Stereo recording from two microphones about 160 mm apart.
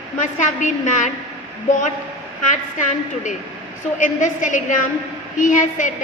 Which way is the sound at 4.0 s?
50° left (ahead or behind).